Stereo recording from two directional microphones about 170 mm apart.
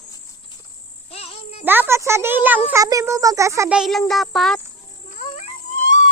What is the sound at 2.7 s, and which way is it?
Speech, 20° right (ahead or behind).